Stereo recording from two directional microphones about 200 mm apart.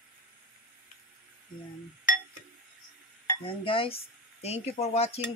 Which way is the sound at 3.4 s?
25° left (ahead or behind).